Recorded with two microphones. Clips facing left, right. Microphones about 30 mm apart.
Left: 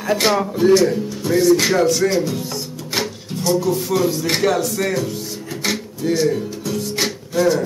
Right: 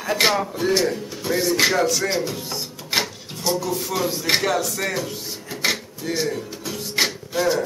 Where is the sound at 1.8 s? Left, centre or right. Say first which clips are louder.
Left 5 dB; centre.